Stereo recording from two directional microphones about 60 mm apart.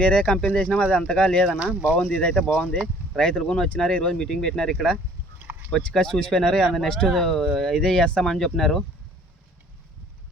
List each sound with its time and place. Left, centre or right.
0.0 s speech: left
1.5 s speech: centre
1.7 s speech: right
2.0 s speech: centre